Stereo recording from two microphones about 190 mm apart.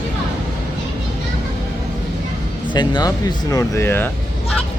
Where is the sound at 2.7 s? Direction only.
25° left (ahead or behind).